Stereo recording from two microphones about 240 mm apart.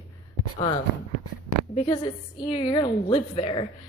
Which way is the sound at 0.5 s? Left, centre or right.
Left.